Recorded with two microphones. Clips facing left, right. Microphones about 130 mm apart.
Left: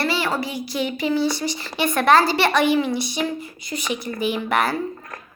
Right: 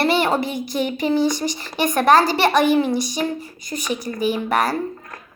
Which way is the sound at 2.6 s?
45° right (ahead or behind).